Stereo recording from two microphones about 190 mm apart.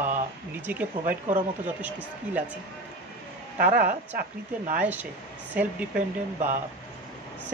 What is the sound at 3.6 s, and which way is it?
A woman's voice, 45° right (ahead or behind).